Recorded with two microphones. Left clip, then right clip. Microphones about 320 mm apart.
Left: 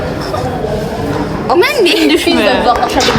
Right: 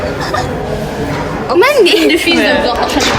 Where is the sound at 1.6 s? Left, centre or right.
Centre.